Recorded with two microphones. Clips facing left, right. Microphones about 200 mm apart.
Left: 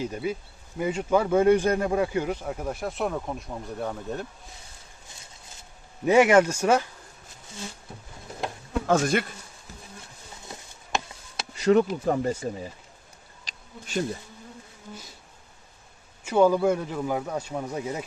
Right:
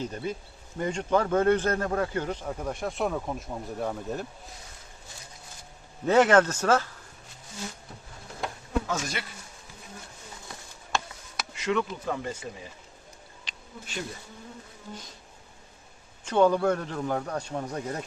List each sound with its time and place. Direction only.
0.0 s a man's voice: 10° left (ahead or behind)
6.1 s a man's voice: 10° left (ahead or behind)
8.9 s speech: 55° left (ahead or behind)
10.5 s a sound: 25° left (ahead or behind)
13.4 s bee: 40° left (ahead or behind)
16.2 s a man's voice: 5° left (ahead or behind)